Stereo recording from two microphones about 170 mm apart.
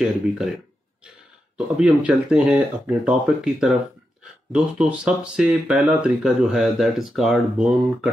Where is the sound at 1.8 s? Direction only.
5° right (ahead or behind).